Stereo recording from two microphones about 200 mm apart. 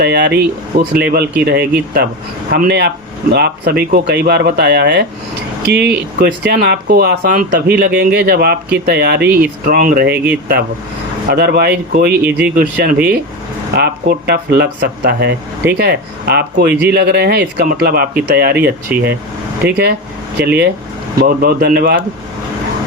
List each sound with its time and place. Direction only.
0.0 s speech: 55° right (ahead or behind)
18.9 s speech: 5° right (ahead or behind)
19.6 s speech: 55° right (ahead or behind)